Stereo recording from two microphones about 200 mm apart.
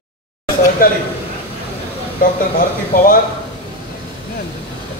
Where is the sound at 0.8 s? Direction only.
45° left (ahead or behind).